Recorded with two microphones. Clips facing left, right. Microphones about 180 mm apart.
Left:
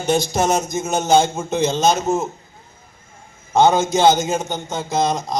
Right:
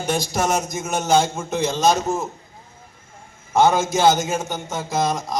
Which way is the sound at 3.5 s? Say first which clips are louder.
Left 2 dB; 20° left (ahead or behind).